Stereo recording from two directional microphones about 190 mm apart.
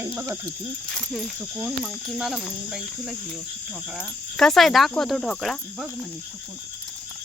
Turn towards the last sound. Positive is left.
turn(degrees=0)  # may be behind; listen again after turning